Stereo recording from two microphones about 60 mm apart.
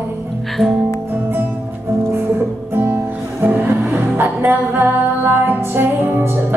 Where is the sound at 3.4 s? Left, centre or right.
Right.